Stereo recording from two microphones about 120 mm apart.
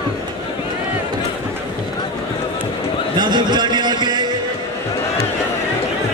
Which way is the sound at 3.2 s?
35° right (ahead or behind).